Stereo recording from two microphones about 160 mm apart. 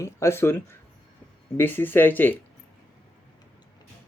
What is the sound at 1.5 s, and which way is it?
Speech, 10° left (ahead or behind).